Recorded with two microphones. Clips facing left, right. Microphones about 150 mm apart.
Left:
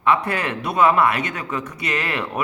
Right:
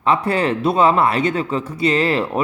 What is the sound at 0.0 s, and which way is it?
Speech, 30° right (ahead or behind).